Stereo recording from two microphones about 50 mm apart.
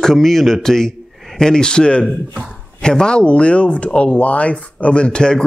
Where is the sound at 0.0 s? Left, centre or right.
Centre.